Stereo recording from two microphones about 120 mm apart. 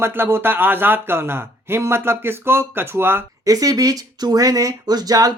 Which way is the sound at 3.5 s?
30° right (ahead or behind).